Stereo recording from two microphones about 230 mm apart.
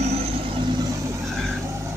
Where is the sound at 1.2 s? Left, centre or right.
Centre.